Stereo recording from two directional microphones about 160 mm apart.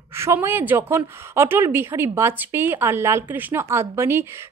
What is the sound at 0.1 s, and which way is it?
Speech, 15° right (ahead or behind).